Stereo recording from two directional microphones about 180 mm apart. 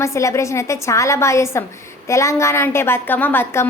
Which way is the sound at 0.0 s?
15° left (ahead or behind).